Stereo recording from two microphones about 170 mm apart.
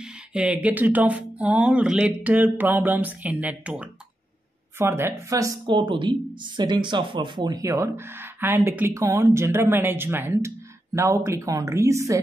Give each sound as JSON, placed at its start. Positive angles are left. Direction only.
{"t": 0.3, "sound": "speech", "side_deg": -5}